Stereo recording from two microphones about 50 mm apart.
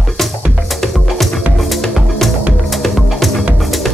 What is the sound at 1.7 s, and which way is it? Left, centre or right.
Music, centre.